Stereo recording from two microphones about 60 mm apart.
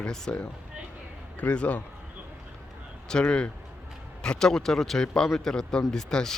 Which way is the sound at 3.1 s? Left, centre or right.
Centre.